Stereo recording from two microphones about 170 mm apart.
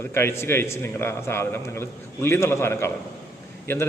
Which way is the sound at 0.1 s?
15° left (ahead or behind).